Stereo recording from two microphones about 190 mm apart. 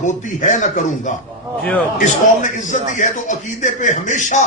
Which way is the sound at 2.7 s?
40° left (ahead or behind).